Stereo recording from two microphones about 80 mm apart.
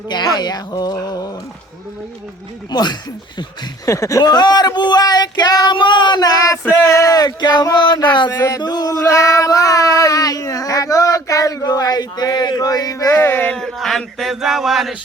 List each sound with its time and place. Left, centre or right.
0.1 s speech: left
2.6 s speech: left
3.8 s speech: left
4.2 s speech: left
5.7 s a sound: left
6.7 s speech: left
8.0 s a sound: left
8.3 s music: left
8.6 s male singing: left
13.1 s a sound: left
13.5 s speech: centre